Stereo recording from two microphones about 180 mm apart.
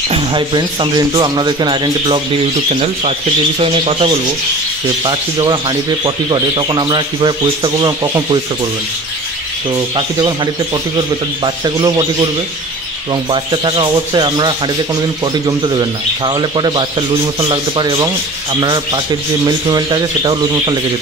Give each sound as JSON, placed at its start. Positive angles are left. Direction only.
{"t": 0.1, "sound": "speech", "side_deg": -25}
{"t": 2.7, "sound": "speech", "side_deg": -35}
{"t": 9.9, "sound": "speech", "side_deg": -25}